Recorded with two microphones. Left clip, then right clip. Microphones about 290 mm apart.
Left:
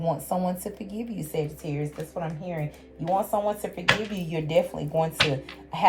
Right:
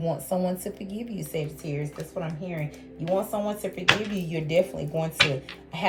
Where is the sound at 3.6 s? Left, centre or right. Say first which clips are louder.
Right 1 dB; centre.